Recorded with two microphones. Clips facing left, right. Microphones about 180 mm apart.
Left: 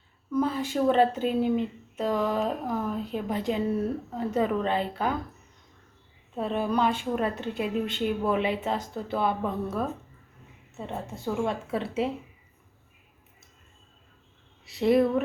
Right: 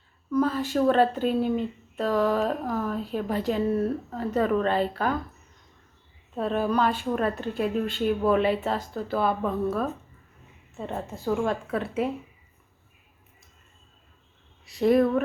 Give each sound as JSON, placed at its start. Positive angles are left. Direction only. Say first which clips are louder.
{"t": 0.3, "sound": "a woman's voice", "louder": "right 2 dB", "side_deg": 15}
{"t": 6.3, "sound": "a woman's voice", "louder": "right 2 dB", "side_deg": 15}
{"t": 11.2, "sound": "a woman's voice", "louder": "right 3 dB", "side_deg": 25}
{"t": 14.8, "sound": "a woman's voice", "louder": "right 1 dB", "side_deg": 20}